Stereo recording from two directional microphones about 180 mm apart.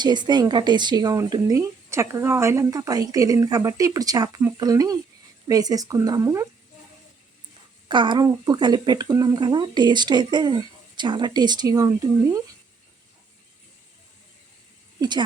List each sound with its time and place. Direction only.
0.0 s speech: 25° right (ahead or behind)
7.9 s speech: 25° right (ahead or behind)